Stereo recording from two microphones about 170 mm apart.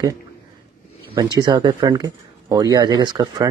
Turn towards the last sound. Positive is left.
turn(degrees=-25)  # may be behind; listen again after turning